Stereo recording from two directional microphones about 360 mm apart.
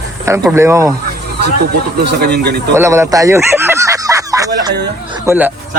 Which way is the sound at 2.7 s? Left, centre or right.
Centre.